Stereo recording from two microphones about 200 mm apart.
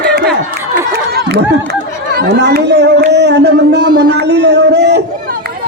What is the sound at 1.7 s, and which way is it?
Chatter, 55° right (ahead or behind).